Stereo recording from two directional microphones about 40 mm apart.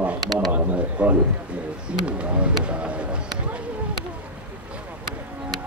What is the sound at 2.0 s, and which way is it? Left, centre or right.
Speech, right.